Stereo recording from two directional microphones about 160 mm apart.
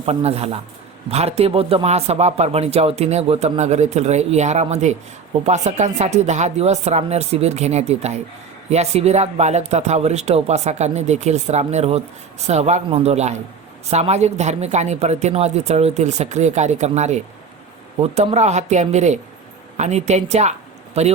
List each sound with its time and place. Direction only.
0.0 s a man's voice: 40° right (ahead or behind)